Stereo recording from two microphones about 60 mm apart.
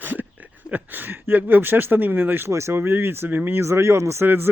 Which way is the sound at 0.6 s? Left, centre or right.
Right.